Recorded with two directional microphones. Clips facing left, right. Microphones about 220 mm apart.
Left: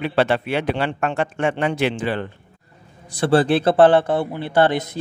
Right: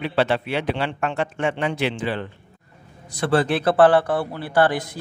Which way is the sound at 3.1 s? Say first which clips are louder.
Left 4 dB; 30° left (ahead or behind).